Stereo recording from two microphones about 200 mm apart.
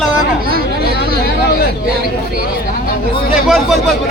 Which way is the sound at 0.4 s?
50° right (ahead or behind).